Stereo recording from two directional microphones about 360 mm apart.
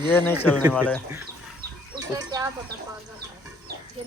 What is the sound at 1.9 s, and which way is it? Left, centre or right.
Speech, centre.